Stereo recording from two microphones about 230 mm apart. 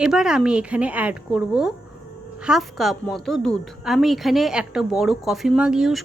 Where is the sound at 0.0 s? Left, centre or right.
Centre.